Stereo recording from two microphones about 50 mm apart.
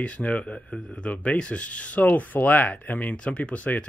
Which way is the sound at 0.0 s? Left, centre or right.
Left.